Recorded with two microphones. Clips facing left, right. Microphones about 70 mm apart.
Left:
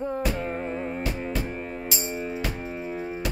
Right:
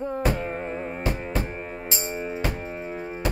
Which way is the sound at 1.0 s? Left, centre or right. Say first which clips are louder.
Right 1 dB; right.